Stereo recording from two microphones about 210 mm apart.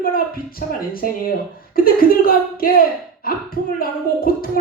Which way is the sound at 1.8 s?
45° left (ahead or behind).